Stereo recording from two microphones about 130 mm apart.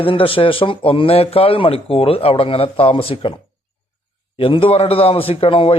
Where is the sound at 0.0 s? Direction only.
45° left (ahead or behind).